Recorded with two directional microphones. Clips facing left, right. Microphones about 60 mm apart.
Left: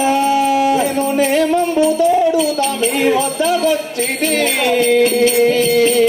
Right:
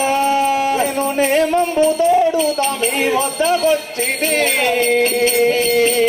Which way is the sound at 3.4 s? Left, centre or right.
Right.